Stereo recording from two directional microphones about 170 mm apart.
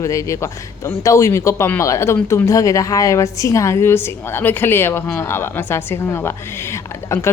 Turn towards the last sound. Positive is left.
turn(degrees=15)  # may be behind; listen again after turning